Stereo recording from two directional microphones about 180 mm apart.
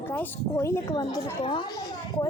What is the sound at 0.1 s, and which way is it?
A woman's voice, 15° left (ahead or behind).